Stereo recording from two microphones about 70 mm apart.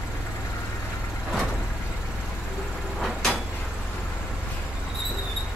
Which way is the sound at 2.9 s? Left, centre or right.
Centre.